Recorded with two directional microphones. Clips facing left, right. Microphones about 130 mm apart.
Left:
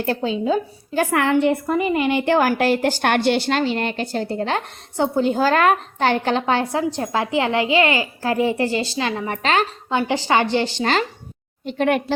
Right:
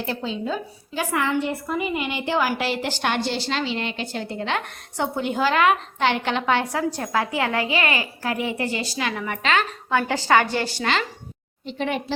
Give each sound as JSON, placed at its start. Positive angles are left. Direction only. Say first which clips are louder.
{"t": 0.0, "sound": "a woman's voice", "louder": "left 6 dB", "side_deg": 50}
{"t": 0.3, "sound": "a woman's voice", "louder": "left 8 dB", "side_deg": 5}
{"t": 0.9, "sound": "a woman's voice", "louder": "left 5 dB", "side_deg": 60}
{"t": 2.0, "sound": "a woman's voice", "louder": "left 7 dB", "side_deg": 50}
{"t": 9.9, "sound": "a woman's voice", "louder": "even", "side_deg": 20}
{"t": 11.6, "sound": "a woman's voice", "louder": "left 7 dB", "side_deg": 55}